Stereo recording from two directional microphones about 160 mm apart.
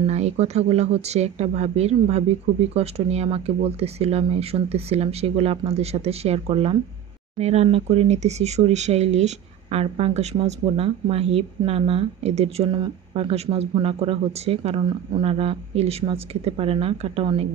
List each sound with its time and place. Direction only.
0.0 s speech: 45° right (ahead or behind)